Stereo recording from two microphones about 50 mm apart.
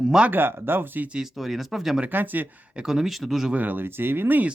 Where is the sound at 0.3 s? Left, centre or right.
Right.